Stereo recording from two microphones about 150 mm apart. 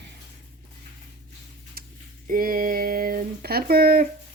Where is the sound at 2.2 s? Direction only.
70° right (ahead or behind).